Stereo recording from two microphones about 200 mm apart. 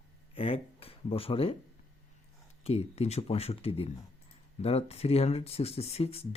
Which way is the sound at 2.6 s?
30° left (ahead or behind).